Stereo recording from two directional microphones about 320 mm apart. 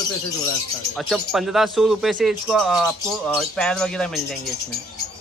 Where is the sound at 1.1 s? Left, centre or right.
Centre.